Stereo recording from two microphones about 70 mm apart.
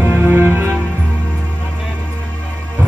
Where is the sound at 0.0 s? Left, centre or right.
Right.